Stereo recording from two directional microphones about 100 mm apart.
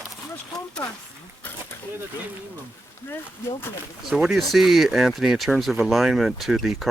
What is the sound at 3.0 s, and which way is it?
Speech, 20° left (ahead or behind).